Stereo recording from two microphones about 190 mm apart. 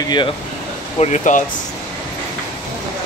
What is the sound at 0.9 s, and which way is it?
Speech, 35° left (ahead or behind).